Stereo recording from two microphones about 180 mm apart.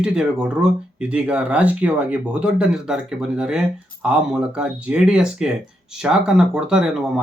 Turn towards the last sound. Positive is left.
turn(degrees=-5)  # may be behind; listen again after turning